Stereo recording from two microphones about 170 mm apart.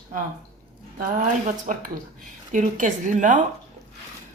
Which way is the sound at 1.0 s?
50° right (ahead or behind).